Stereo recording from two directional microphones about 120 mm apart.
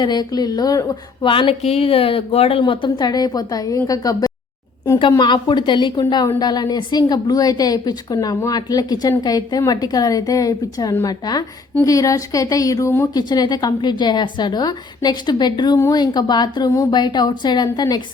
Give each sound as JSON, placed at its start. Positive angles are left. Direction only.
{"t": 0.0, "sound": "a woman's voice", "side_deg": 35}
{"t": 1.2, "sound": "a woman's voice", "side_deg": 45}
{"t": 13.1, "sound": "a woman's voice", "side_deg": 35}